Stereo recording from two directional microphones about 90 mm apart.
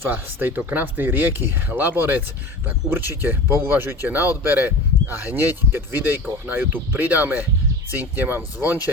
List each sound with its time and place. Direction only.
0.0 s speech: 25° right (ahead or behind)